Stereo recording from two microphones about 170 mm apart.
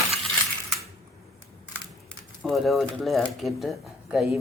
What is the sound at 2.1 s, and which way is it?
Speech, centre (ahead or behind).